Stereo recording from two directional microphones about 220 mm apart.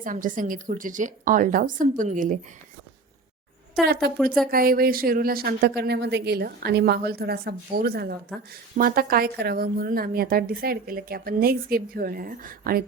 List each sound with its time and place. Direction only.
0.0 s a woman's voice: 35° right (ahead or behind)
4.5 s a woman's voice: 40° right (ahead or behind)